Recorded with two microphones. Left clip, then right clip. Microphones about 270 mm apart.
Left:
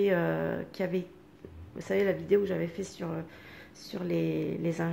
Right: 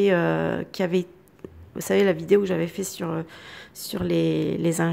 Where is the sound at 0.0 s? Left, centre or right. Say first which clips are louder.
Right 7 dB; right.